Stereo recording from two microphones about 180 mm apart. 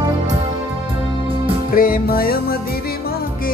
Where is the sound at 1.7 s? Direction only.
55° left (ahead or behind).